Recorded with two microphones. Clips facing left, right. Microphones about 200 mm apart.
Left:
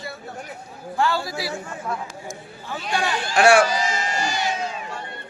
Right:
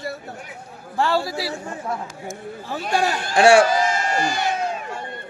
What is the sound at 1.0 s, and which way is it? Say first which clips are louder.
Speech: right 2 dB; 35° right (ahead or behind).